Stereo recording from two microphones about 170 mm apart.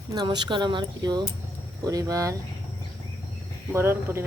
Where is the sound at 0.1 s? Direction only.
25° right (ahead or behind).